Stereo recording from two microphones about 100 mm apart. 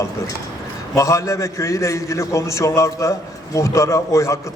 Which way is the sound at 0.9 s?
30° left (ahead or behind).